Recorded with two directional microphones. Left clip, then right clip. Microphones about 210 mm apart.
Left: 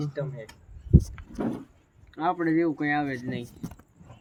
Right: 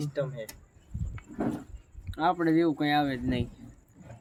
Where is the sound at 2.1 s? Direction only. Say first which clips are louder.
Even; 5° right (ahead or behind).